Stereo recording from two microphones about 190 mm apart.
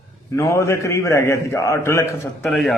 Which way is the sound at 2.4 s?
Centre (ahead or behind).